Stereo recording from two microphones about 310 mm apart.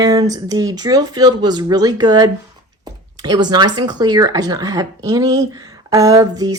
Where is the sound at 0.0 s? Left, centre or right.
Centre.